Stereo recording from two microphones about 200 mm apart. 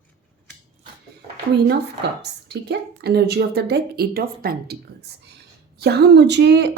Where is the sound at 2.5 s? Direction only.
55° right (ahead or behind).